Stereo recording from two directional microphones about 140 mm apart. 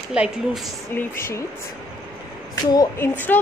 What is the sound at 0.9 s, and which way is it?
Speech, 20° left (ahead or behind).